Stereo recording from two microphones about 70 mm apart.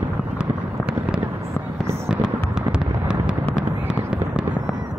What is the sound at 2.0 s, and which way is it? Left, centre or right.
Fireworks, centre.